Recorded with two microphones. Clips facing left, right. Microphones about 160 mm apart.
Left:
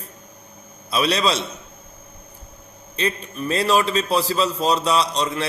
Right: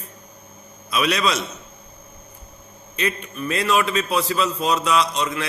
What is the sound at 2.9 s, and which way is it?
A man's voice, 35° left (ahead or behind).